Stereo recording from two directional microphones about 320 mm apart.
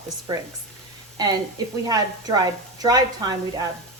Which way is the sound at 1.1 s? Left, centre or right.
Centre.